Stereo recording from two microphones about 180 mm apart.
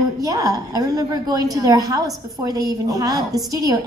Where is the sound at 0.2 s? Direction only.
20° right (ahead or behind).